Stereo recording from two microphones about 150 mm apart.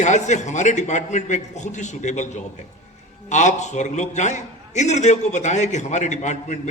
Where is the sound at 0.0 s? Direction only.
50° left (ahead or behind).